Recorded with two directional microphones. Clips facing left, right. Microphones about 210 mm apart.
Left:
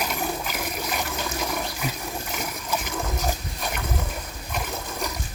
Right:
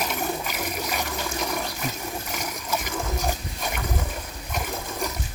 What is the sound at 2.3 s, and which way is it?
Water, 5° left (ahead or behind).